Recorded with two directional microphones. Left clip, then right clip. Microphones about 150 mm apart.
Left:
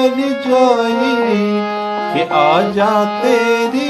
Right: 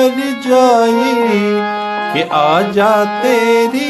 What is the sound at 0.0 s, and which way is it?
Music, 55° right (ahead or behind).